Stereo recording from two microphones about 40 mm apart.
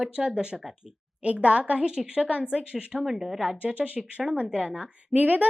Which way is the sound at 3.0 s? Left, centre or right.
Centre.